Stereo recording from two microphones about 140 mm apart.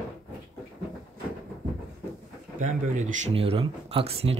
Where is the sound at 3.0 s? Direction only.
55° right (ahead or behind).